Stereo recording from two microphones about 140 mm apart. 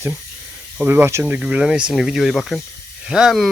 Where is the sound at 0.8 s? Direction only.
15° right (ahead or behind).